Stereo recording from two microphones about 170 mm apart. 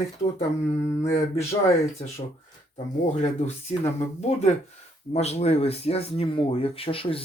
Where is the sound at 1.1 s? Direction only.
40° left (ahead or behind).